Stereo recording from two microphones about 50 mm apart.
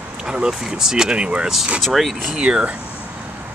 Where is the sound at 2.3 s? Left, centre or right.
Centre.